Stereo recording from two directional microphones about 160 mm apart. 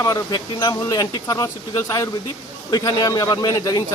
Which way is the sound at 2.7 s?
25° left (ahead or behind).